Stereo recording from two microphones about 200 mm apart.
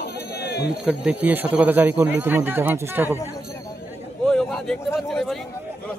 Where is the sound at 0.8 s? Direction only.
5° right (ahead or behind).